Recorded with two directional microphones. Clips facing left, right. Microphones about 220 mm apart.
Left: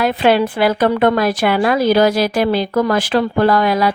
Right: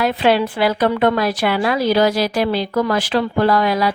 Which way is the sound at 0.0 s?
50° left (ahead or behind).